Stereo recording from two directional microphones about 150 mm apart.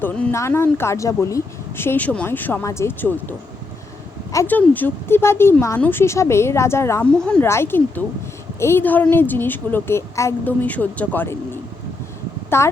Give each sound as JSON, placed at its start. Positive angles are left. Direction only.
{"t": 0.0, "sound": "speech", "side_deg": 15}
{"t": 7.1, "sound": "speech", "side_deg": 5}
{"t": 7.4, "sound": "a woman's voice", "side_deg": 15}